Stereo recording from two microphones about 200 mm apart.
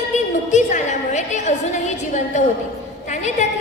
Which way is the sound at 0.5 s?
35° left (ahead or behind).